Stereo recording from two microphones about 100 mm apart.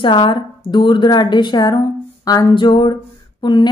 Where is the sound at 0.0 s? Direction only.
55° left (ahead or behind).